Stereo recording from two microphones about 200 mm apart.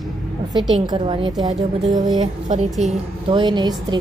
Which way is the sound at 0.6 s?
Centre (ahead or behind).